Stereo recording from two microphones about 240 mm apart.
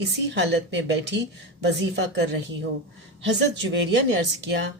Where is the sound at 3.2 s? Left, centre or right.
Right.